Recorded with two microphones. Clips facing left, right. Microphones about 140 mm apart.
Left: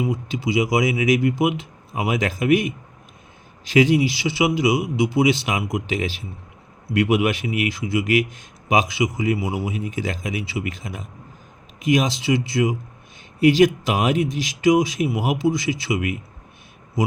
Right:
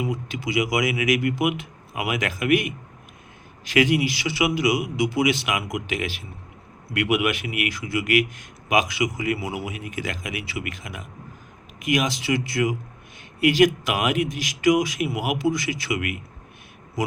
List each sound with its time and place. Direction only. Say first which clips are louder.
0.0 s a man's voice: left 4 dB; 25° left (ahead or behind)